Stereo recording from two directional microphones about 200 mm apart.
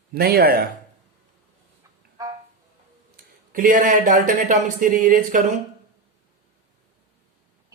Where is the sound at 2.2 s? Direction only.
15° right (ahead or behind).